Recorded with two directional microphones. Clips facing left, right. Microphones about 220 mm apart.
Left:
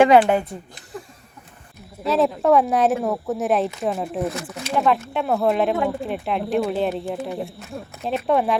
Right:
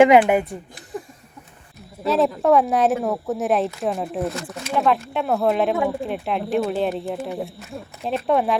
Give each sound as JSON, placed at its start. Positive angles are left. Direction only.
{"t": 0.0, "sound": "a woman's voice", "side_deg": -15}
{"t": 2.0, "sound": "speech", "side_deg": 0}